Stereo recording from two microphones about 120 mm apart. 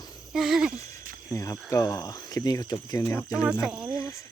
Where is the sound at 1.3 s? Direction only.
25° left (ahead or behind).